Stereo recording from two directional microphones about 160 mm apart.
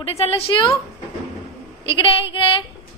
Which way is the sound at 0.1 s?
40° left (ahead or behind).